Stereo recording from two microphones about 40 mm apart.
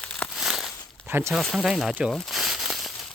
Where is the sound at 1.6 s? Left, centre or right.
Centre.